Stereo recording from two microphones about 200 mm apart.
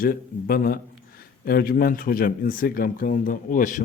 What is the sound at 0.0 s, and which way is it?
Speech, 45° left (ahead or behind).